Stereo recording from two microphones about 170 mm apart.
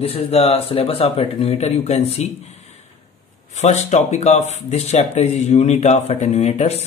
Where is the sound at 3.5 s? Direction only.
40° left (ahead or behind).